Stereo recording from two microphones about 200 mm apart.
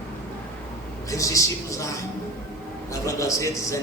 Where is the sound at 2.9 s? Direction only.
15° left (ahead or behind).